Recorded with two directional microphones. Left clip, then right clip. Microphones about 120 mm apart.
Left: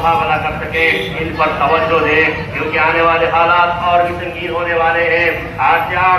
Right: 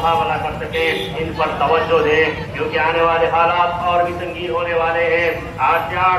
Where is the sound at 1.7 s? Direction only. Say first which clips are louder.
Left 2 dB; 20° right (ahead or behind).